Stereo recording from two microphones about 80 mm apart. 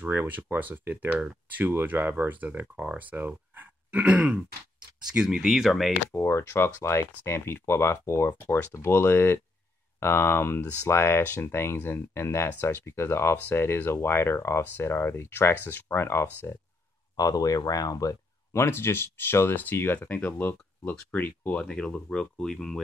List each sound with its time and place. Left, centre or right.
0.0 s speech: right; by 5.9 s centre
6.1 s speech: left
17.2 s speech: left
18.5 s speech: left
21.6 s speech: centre